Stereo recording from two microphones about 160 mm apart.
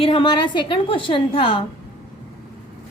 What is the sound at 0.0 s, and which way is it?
A woman's voice, 35° left (ahead or behind).